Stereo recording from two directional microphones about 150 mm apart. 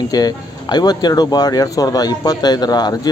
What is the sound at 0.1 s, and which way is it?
Speech, 25° left (ahead or behind).